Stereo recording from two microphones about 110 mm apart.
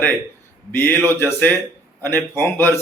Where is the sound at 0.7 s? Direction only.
20° left (ahead or behind).